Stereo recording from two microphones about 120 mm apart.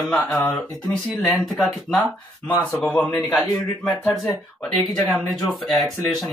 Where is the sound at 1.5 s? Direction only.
Centre (ahead or behind).